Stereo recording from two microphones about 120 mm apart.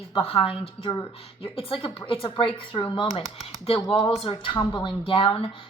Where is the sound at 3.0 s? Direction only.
60° left (ahead or behind).